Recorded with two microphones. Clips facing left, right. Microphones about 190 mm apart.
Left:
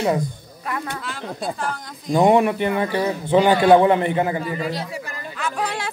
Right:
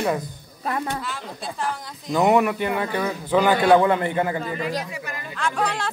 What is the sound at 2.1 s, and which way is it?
Speech, 25° left (ahead or behind).